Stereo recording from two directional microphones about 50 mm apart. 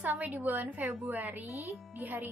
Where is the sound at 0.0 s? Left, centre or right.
Right.